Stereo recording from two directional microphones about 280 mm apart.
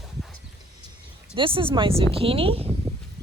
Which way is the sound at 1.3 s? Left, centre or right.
Centre.